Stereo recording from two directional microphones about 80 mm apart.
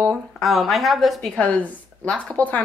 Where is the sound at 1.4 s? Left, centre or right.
Centre.